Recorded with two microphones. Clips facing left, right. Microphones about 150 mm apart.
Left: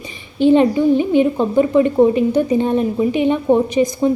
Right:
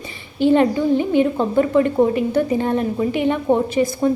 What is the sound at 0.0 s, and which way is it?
A woman's voice, 20° left (ahead or behind).